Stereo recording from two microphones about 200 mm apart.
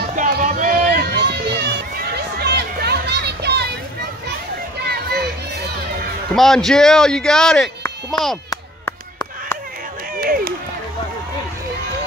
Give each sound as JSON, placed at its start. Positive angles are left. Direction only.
{"t": 0.1, "sound": "run", "side_deg": -40}
{"t": 2.3, "sound": "a sound", "side_deg": -55}
{"t": 6.3, "sound": "speech", "side_deg": 0}
{"t": 10.2, "sound": "run", "side_deg": -45}